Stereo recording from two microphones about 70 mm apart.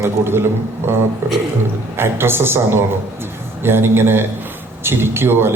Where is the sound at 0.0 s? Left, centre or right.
Right.